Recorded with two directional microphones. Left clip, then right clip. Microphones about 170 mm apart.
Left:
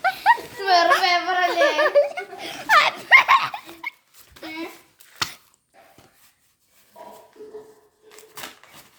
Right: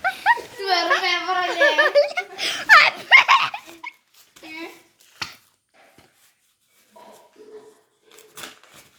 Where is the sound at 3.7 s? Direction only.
20° left (ahead or behind).